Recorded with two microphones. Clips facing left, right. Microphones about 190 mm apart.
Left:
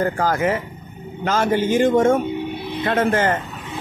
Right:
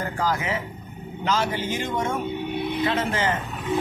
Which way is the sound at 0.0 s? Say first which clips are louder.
Left 7 dB; 50° left (ahead or behind).